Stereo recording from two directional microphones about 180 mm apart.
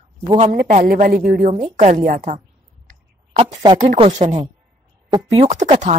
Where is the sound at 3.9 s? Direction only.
35° right (ahead or behind).